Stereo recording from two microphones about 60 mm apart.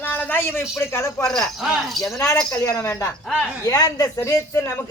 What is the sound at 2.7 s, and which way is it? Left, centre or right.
Speech, left.